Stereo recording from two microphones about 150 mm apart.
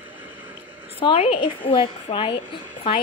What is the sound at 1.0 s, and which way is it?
A woman's voice, 40° left (ahead or behind).